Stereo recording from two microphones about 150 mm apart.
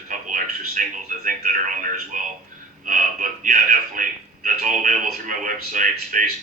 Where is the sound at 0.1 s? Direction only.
60° right (ahead or behind).